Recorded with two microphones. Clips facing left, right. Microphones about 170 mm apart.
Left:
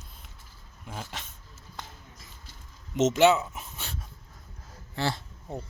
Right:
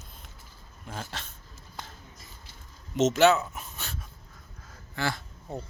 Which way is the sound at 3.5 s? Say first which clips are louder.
Even; 25° left (ahead or behind).